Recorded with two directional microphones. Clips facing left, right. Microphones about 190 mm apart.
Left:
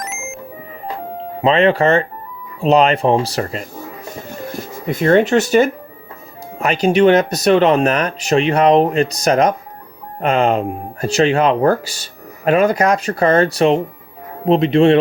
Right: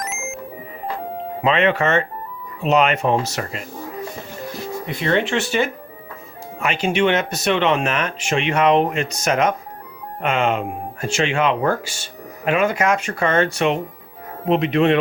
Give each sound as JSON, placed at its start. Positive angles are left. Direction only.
{"t": 0.0, "sound": "music", "side_deg": 0}
{"t": 1.4, "sound": "speech", "side_deg": 35}
{"t": 4.5, "sound": "speech", "side_deg": 45}